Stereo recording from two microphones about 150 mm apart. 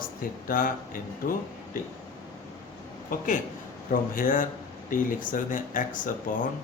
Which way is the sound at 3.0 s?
55° left (ahead or behind).